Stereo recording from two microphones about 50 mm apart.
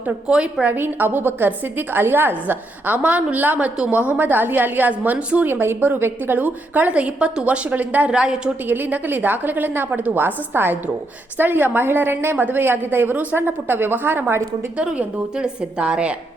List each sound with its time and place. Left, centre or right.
0.3 s a woman's voice: centre
0.7 s a woman's voice: right
5.5 s a woman's voice: right
6.3 s a woman's voice: right
8.1 s a woman's voice: centre
8.6 s a woman's voice: right
14.8 s a woman's voice: centre